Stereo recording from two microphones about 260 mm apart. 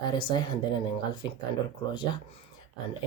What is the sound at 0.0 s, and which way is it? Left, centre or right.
Speech, centre.